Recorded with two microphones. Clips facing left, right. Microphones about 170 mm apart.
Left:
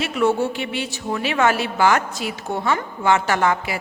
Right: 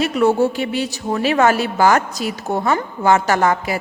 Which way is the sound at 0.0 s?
40° right (ahead or behind).